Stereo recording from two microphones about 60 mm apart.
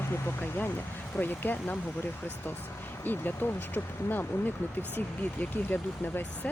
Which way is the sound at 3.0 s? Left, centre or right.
Left.